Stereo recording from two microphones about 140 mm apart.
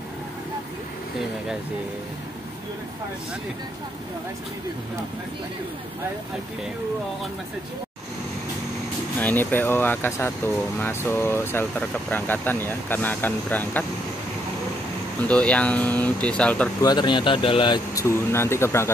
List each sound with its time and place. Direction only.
9.2 s speech: 15° left (ahead or behind)
15.2 s speech: 10° left (ahead or behind)
16.8 s speech: 30° left (ahead or behind)
18.0 s speech: 15° left (ahead or behind)